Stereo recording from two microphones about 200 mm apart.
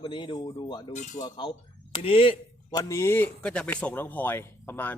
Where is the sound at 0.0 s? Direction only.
25° left (ahead or behind).